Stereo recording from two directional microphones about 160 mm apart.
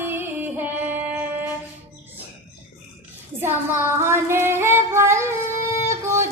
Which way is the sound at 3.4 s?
15° right (ahead or behind).